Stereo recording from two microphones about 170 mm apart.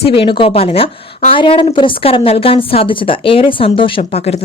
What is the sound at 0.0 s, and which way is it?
A woman's voice, 35° left (ahead or behind).